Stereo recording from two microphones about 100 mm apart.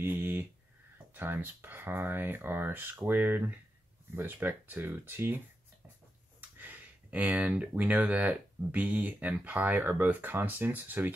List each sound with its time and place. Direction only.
0.0 s a sound: 20° right (ahead or behind)
1.1 s speech: 20° right (ahead or behind)
6.6 s speech: 15° right (ahead or behind)